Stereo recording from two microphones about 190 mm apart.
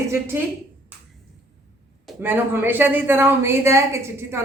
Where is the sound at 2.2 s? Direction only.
10° right (ahead or behind).